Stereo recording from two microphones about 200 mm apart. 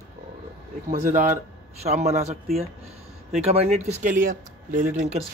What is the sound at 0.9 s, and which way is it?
Speech, 40° right (ahead or behind).